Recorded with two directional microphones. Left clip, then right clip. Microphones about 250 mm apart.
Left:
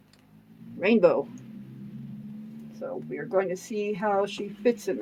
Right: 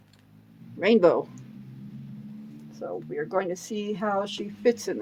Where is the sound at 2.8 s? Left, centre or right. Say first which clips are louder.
Right 2 dB; right.